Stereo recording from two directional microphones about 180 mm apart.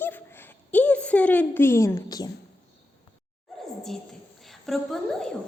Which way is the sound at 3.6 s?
Centre (ahead or behind).